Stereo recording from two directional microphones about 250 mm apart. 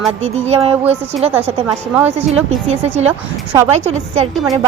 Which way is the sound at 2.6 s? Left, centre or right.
Right.